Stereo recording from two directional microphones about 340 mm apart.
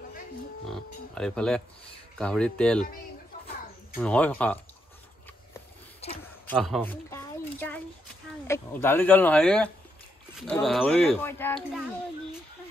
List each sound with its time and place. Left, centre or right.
0.7 s speech: centre
3.9 s speech: centre
6.0 s a man's voice: centre
6.4 s speech: centre